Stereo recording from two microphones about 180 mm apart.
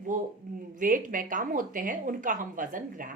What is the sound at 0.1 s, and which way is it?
Speech, 50° right (ahead or behind).